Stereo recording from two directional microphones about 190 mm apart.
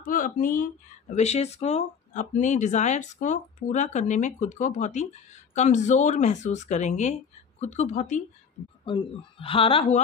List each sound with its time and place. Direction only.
0.0 s speech: 45° left (ahead or behind)
1.1 s speech: 35° left (ahead or behind)